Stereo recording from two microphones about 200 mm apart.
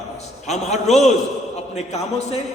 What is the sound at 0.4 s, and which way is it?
A man's voice, 35° left (ahead or behind).